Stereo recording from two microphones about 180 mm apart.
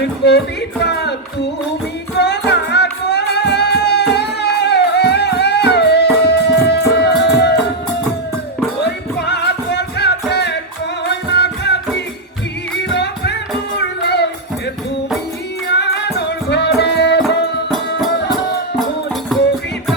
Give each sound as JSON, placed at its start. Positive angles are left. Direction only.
{"t": 0.0, "sound": "speech", "side_deg": 70}
{"t": 2.1, "sound": "music", "side_deg": 70}
{"t": 7.5, "sound": "music", "side_deg": 5}
{"t": 8.8, "sound": "music", "side_deg": 70}
{"t": 15.6, "sound": "music", "side_deg": 70}